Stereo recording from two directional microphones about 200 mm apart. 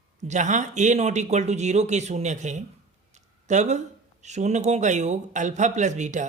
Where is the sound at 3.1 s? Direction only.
35° right (ahead or behind).